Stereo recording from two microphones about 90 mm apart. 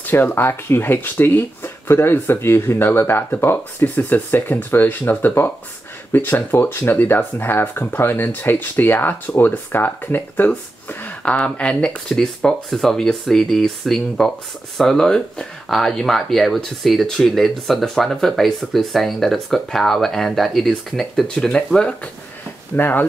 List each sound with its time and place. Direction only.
0.0 s speech: 25° left (ahead or behind)
22.8 s speech: 20° left (ahead or behind)